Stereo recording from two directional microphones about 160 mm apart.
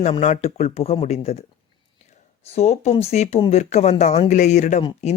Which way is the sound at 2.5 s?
45° left (ahead or behind).